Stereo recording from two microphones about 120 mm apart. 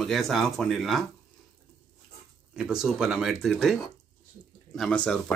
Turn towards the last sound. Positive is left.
turn(degrees=10)  # may be behind; listen again after turning